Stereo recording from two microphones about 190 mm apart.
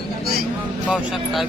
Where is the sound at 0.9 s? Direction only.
Centre (ahead or behind).